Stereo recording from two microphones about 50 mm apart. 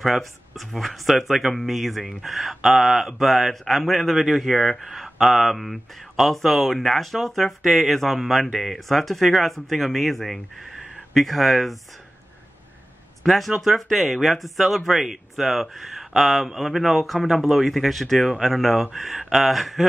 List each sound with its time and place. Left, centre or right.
0.0 s speech: centre
13.2 s speech: centre